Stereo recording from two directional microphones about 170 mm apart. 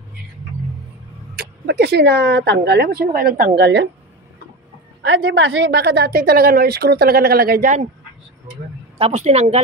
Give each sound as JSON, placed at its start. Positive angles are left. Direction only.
{"t": 1.3, "sound": "speech", "side_deg": -70}
{"t": 5.0, "sound": "a woman's voice", "side_deg": -90}
{"t": 8.9, "sound": "a woman's voice", "side_deg": -40}